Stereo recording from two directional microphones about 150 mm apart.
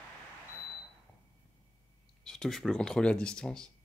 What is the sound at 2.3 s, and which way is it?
Speech, 5° left (ahead or behind).